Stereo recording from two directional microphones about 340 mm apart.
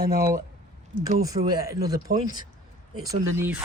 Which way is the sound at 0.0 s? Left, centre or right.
Right.